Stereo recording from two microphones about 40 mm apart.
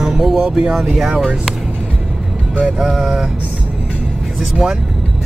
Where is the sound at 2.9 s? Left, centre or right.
Centre.